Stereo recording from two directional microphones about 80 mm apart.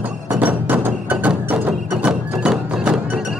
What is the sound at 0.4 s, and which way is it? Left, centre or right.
Music, right.